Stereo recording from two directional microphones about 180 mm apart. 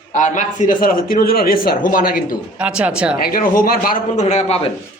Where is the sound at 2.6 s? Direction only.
5° right (ahead or behind).